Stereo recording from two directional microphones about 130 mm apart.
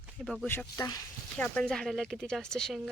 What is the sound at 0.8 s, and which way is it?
Speech, 30° left (ahead or behind).